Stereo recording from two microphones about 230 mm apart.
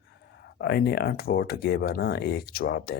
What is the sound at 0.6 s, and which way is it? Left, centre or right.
Speech, left.